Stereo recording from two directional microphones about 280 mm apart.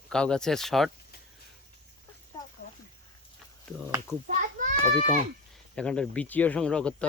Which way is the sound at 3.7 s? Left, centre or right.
Centre.